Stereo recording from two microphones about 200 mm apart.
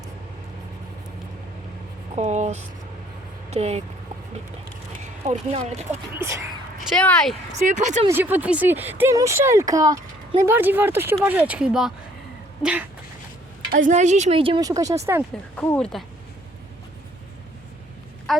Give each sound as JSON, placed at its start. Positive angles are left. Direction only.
{"t": 2.1, "sound": "a sound", "side_deg": -35}
{"t": 3.5, "sound": "a woman's voice", "side_deg": -30}
{"t": 5.0, "sound": "speech", "side_deg": -35}
{"t": 6.1, "sound": "speech", "side_deg": -15}
{"t": 6.9, "sound": "speech", "side_deg": 5}
{"t": 7.5, "sound": "a woman's voice", "side_deg": -35}
{"t": 8.0, "sound": "speech", "side_deg": -10}
{"t": 13.7, "sound": "a woman's voice", "side_deg": -40}
{"t": 15.5, "sound": "speech", "side_deg": 5}
{"t": 18.3, "sound": "speech", "side_deg": 0}